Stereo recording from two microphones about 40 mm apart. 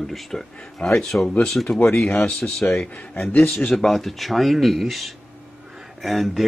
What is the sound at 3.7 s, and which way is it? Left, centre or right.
Speech, centre.